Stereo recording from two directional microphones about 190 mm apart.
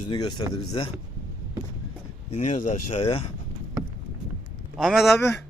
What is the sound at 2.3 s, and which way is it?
Speech, 40° left (ahead or behind).